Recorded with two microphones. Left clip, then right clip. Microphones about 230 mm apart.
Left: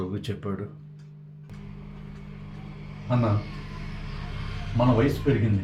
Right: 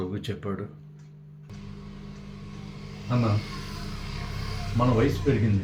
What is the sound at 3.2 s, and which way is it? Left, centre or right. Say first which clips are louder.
Speech: left 1 dB; right.